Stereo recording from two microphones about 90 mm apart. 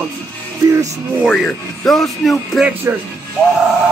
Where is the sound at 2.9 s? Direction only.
30° right (ahead or behind).